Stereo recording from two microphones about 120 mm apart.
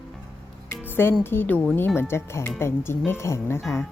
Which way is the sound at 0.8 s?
20° left (ahead or behind).